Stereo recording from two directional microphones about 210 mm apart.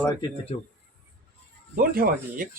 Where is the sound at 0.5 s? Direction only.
25° left (ahead or behind).